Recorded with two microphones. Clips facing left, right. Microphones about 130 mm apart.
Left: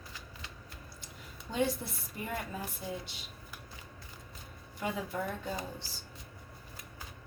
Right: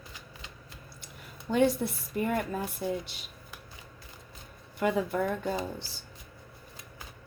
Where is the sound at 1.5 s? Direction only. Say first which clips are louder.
Right 7 dB; 60° right (ahead or behind).